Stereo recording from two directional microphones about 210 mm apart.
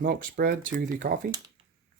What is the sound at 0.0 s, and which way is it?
Speech, 45° right (ahead or behind).